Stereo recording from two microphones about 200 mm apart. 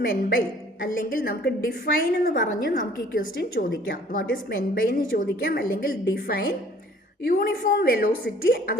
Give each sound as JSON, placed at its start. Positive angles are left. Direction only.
{"t": 0.0, "sound": "a woman's voice", "side_deg": 45}